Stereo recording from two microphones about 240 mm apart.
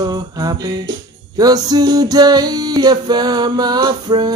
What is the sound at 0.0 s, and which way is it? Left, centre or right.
Music, centre.